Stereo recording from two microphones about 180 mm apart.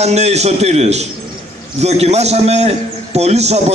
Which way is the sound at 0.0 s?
35° right (ahead or behind).